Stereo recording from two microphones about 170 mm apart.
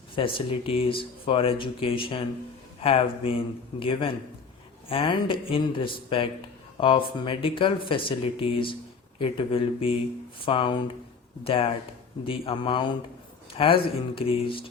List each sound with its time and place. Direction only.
0.2 s a man's voice: 30° left (ahead or behind)